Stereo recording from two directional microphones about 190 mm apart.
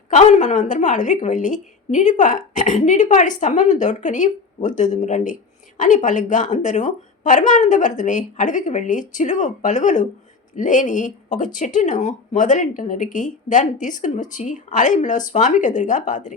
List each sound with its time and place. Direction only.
0.1 s a woman's voice: 40° left (ahead or behind)